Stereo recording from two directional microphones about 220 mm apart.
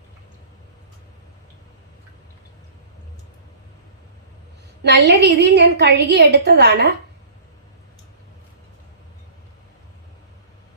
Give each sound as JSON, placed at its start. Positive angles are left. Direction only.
{"t": 4.8, "sound": "a woman's voice", "side_deg": -50}